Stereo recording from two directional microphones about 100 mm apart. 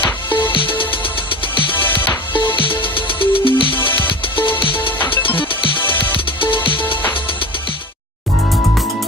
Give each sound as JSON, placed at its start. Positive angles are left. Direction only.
{"t": 0.3, "sound": "music", "side_deg": 20}
{"t": 0.5, "sound": "music", "side_deg": 60}
{"t": 1.7, "sound": "music", "side_deg": 20}
{"t": 2.6, "sound": "music", "side_deg": 60}
{"t": 4.9, "sound": "music", "side_deg": 20}
{"t": 6.4, "sound": "music", "side_deg": 60}